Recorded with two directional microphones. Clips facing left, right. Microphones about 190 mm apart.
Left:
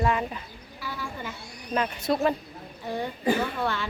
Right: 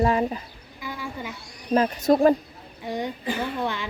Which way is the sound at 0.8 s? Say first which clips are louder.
Right 2 dB; 15° right (ahead or behind).